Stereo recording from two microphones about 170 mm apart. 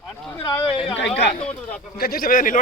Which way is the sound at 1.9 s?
60° left (ahead or behind).